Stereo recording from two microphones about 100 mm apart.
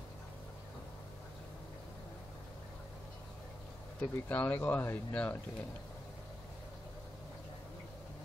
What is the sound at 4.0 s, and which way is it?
Speech, 15° left (ahead or behind).